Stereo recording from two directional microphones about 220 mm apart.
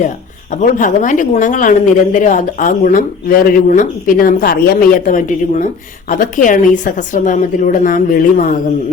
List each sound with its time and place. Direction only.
0.6 s speech: 35° left (ahead or behind)